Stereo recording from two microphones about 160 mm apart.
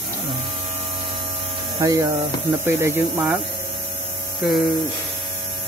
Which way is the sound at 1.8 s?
20° right (ahead or behind).